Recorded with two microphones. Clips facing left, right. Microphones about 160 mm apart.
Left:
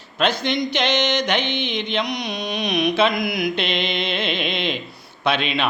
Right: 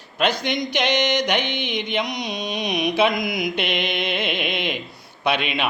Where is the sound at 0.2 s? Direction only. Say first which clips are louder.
Left 1 dB; 15° right (ahead or behind).